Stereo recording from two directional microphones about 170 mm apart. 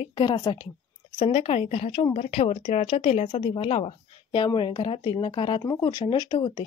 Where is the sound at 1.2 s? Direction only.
35° left (ahead or behind).